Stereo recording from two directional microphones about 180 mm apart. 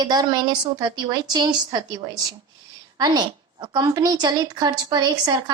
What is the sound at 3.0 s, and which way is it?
A woman's voice, 25° right (ahead or behind).